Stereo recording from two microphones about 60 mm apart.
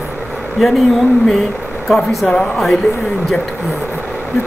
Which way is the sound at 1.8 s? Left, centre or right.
Centre.